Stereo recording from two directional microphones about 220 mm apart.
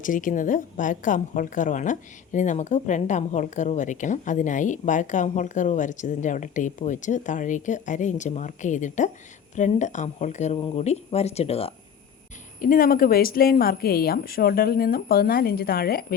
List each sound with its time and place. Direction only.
0.0 s a woman's voice: 35° left (ahead or behind)
12.5 s speech: 40° left (ahead or behind)